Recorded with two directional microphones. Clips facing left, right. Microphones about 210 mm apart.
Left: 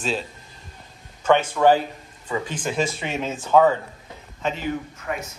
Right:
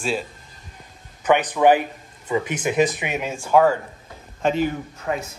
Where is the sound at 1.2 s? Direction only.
15° right (ahead or behind).